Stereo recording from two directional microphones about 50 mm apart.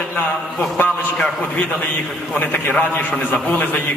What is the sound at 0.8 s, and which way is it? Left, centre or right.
A man's voice, left.